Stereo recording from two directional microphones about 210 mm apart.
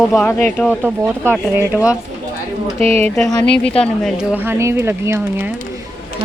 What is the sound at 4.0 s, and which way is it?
Speech, 5° right (ahead or behind).